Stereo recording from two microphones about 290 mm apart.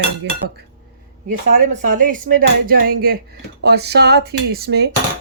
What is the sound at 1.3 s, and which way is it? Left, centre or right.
Speech, right.